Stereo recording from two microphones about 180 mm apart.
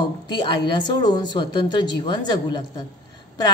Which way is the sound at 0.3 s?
25° left (ahead or behind).